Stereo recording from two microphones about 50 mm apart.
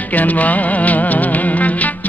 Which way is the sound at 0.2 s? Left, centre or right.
Left.